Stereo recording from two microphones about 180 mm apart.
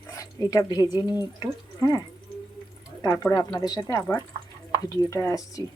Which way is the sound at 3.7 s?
20° left (ahead or behind).